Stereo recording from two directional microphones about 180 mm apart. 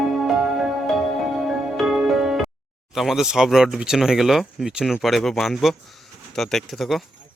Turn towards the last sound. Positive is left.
turn(degrees=0)  # may be behind; listen again after turning